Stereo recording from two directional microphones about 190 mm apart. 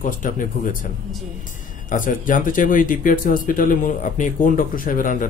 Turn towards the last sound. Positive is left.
turn(degrees=45)  # may be behind; listen again after turning